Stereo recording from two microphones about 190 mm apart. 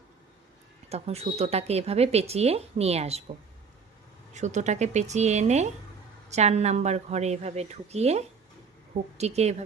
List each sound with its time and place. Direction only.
0.9 s speech: 35° right (ahead or behind)
4.4 s speech: 40° right (ahead or behind)